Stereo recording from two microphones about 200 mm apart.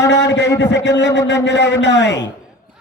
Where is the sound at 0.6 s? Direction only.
60° left (ahead or behind).